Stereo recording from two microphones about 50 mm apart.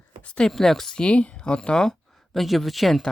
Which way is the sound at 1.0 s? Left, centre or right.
Left.